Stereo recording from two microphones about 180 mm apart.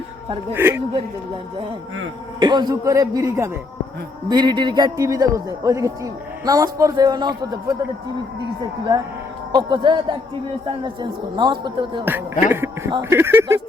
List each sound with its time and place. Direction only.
0.5 s speech: 10° right (ahead or behind)
2.4 s a man's voice: 25° right (ahead or behind)
9.5 s a man's voice: 25° right (ahead or behind)
12.5 s music: 15° right (ahead or behind)
12.9 s speech: 15° right (ahead or behind)